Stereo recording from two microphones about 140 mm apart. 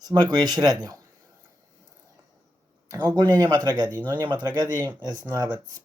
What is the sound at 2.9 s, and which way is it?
Speech, 30° right (ahead or behind).